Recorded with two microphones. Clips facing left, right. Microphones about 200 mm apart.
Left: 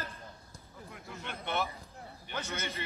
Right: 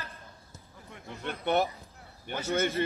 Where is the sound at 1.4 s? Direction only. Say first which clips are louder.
Right 8 dB; 45° right (ahead or behind).